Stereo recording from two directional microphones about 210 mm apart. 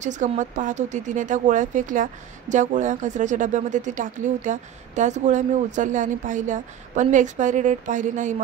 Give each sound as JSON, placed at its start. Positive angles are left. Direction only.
{"t": 0.0, "sound": "speech", "side_deg": -35}